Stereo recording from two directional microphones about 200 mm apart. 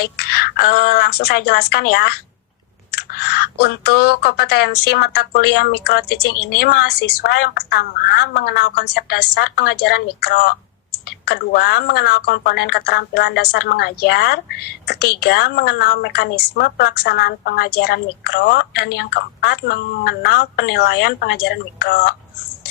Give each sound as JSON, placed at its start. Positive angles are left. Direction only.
{"t": 0.0, "sound": "speech", "side_deg": 50}